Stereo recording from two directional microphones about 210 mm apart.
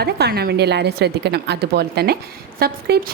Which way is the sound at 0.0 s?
50° right (ahead or behind).